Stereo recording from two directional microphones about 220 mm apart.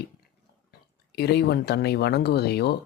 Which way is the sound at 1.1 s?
50° left (ahead or behind).